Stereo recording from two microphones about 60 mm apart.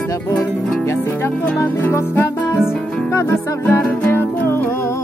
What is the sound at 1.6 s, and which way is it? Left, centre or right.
Music, left.